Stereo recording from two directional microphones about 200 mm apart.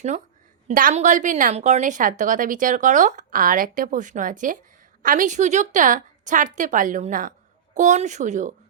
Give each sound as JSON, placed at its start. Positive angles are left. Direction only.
{"t": 0.7, "sound": "a woman's voice", "side_deg": -45}